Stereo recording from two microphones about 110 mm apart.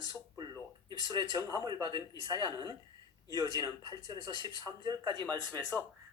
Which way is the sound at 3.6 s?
40° right (ahead or behind).